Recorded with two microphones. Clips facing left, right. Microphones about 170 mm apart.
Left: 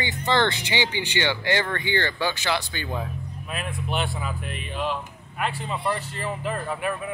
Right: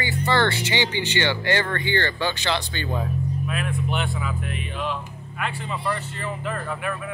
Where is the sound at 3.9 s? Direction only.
35° left (ahead or behind).